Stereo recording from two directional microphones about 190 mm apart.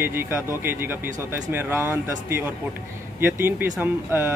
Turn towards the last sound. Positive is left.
turn(degrees=-10)  # may be behind; listen again after turning